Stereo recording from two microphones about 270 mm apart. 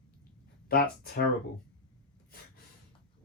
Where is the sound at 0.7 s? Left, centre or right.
Left.